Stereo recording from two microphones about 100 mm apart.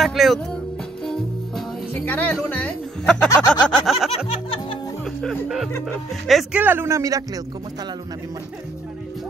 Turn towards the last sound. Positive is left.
turn(degrees=-35)  # may be behind; listen again after turning